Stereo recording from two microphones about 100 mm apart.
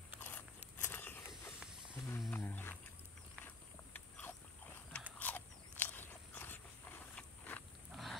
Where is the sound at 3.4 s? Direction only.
20° left (ahead or behind).